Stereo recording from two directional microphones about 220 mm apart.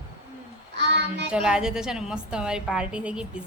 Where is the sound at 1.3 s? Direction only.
5° right (ahead or behind).